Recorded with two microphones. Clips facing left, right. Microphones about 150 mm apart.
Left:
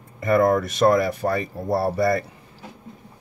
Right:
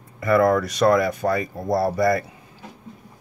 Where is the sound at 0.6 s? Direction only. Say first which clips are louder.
Even; 25° left (ahead or behind).